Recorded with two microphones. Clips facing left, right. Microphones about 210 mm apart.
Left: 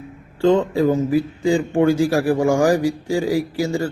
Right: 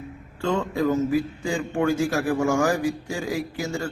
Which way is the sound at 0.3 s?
30° left (ahead or behind).